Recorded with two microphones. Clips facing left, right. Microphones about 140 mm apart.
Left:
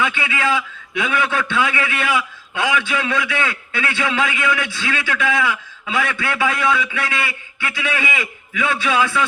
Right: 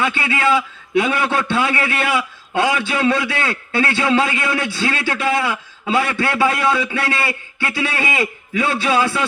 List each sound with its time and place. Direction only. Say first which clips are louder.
0.0 s a man's voice: right 2 dB; 35° right (ahead or behind)